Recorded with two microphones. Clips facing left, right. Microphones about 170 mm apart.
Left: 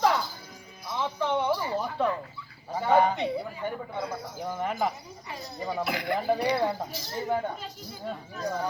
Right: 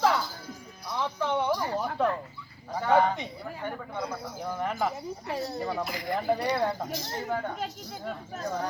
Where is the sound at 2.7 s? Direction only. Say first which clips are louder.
Left 1 dB; 10° left (ahead or behind).